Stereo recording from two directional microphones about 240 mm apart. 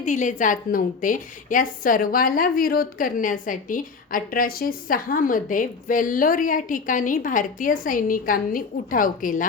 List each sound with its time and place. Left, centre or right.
0.0 s a woman's voice: left